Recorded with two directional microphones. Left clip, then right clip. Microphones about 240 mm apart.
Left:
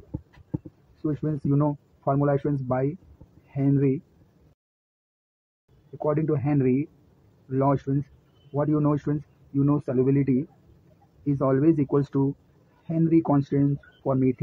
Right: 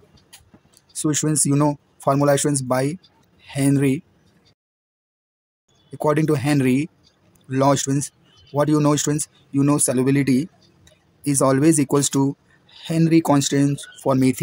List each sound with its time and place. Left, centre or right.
1.0 s speech: right
6.0 s speech: right